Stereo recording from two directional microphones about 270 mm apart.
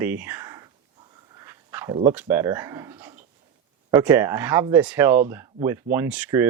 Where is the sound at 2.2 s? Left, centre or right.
Centre.